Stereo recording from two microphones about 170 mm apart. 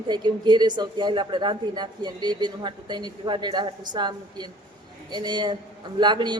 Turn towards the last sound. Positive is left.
turn(degrees=-25)  # may be behind; listen again after turning